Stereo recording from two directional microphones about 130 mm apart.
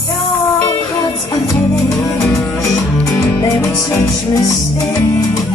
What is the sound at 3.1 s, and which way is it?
Music, 20° left (ahead or behind).